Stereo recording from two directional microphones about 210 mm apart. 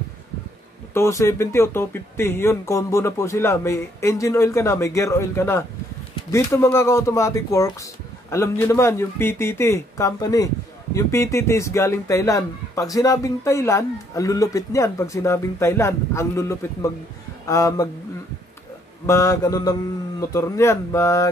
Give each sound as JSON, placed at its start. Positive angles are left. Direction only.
{"t": 0.9, "sound": "speech", "side_deg": 15}
{"t": 19.0, "sound": "speech", "side_deg": 15}